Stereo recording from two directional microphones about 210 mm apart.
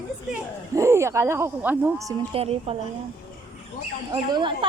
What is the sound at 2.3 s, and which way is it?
Speech, 30° right (ahead or behind).